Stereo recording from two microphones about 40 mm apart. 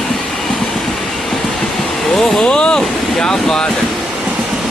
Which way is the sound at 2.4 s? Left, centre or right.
Left.